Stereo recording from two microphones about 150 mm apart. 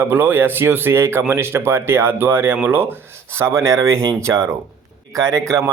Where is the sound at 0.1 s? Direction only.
15° right (ahead or behind).